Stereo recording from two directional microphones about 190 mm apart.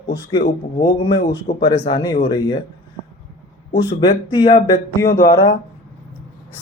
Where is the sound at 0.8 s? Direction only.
25° left (ahead or behind).